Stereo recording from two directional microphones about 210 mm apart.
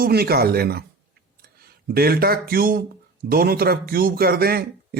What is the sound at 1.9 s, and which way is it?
Speech, 45° right (ahead or behind).